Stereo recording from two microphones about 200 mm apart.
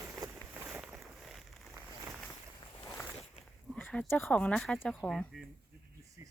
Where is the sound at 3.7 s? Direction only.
5° left (ahead or behind).